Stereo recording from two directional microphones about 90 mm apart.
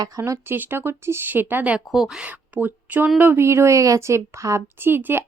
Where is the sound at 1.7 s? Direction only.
5° right (ahead or behind).